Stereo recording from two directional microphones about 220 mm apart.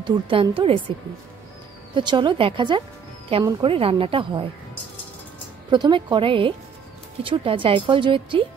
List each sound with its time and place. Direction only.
0.0 s speech: 20° right (ahead or behind)
2.0 s speech: 20° right (ahead or behind)
5.7 s speech: 20° right (ahead or behind)